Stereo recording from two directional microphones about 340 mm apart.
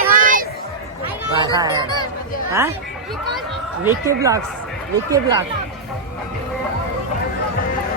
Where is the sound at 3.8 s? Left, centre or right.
Centre.